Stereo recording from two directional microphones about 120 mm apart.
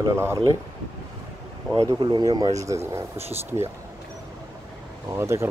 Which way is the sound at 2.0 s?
35° right (ahead or behind).